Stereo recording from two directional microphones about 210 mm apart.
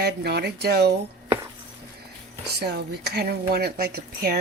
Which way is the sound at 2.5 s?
50° right (ahead or behind).